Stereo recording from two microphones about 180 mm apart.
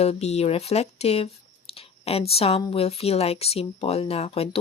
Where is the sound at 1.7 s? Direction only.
35° left (ahead or behind).